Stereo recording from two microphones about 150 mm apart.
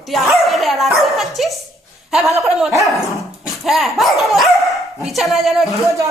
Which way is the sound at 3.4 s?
Centre (ahead or behind).